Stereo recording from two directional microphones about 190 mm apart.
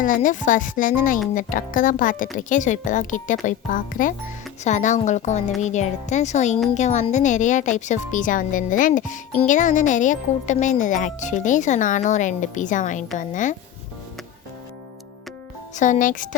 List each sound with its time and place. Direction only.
0.0 s a woman's voice: 45° left (ahead or behind)
15.7 s a woman's voice: 40° left (ahead or behind)